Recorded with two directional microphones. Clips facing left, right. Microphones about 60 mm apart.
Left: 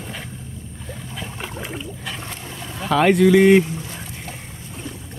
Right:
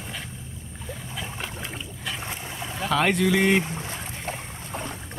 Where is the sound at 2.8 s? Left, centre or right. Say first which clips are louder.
Left 7 dB; centre.